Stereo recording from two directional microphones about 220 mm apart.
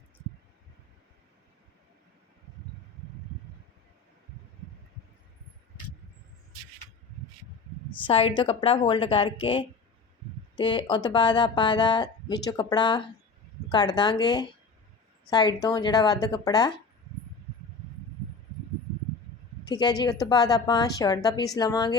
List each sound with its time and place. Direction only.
8.0 s a woman's voice: 25° left (ahead or behind)
19.6 s a woman's voice: 20° left (ahead or behind)